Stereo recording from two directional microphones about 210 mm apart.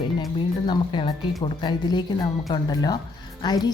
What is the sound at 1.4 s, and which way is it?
Speech, 20° left (ahead or behind).